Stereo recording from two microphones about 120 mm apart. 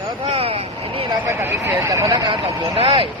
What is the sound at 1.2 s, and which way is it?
Speech, 15° right (ahead or behind).